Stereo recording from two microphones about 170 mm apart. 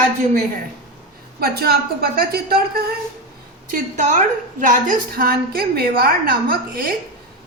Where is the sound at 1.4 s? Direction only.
65° right (ahead or behind).